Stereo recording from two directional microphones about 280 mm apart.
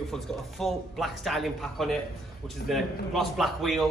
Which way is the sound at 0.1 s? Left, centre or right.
Centre.